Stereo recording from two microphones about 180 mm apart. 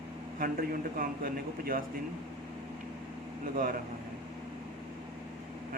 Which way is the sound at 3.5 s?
50° right (ahead or behind).